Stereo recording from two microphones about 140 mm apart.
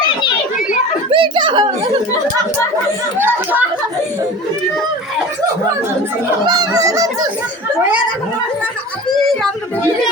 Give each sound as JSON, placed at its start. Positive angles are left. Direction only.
{"t": 1.1, "sound": "a sound", "side_deg": -35}
{"t": 3.2, "sound": "speech", "side_deg": -15}
{"t": 6.4, "sound": "speech", "side_deg": -30}